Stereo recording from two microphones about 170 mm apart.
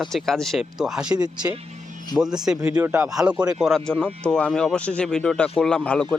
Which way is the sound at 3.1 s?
5° right (ahead or behind).